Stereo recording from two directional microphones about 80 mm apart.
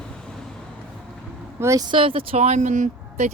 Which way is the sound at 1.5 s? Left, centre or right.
Right.